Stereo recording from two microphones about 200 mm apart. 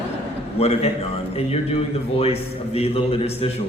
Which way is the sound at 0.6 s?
30° left (ahead or behind).